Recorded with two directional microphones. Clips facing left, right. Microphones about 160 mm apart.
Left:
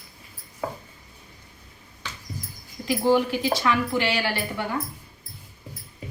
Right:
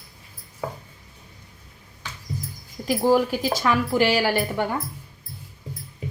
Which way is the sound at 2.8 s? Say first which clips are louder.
Right 1 dB; 45° right (ahead or behind).